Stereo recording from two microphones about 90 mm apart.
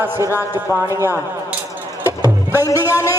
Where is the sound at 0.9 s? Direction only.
35° right (ahead or behind).